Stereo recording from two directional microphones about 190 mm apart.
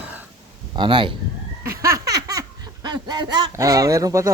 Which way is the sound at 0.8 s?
25° right (ahead or behind).